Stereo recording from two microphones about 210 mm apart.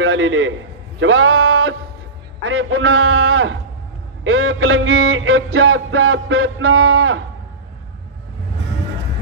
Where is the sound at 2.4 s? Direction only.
70° right (ahead or behind).